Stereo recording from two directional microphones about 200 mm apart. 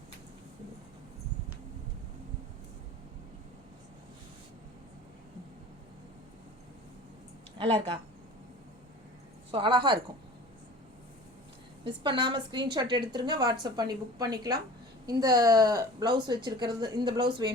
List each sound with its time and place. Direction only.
7.6 s a woman's voice: 30° right (ahead or behind)
9.5 s a woman's voice: 25° right (ahead or behind)
11.9 s a woman's voice: 20° right (ahead or behind)